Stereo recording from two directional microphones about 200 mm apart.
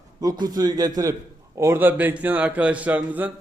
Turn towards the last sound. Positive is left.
turn(degrees=-10)  # may be behind; listen again after turning